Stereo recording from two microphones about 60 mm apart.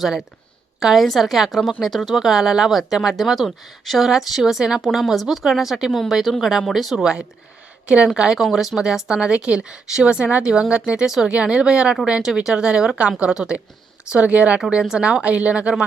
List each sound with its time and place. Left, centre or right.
0.0 s a woman's voice: centre
6.9 s speech: centre